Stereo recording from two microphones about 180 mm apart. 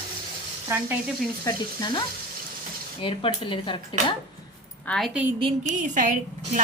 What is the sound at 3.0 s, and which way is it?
Speech, 30° left (ahead or behind).